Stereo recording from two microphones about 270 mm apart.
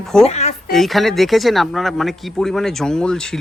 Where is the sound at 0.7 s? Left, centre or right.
Centre.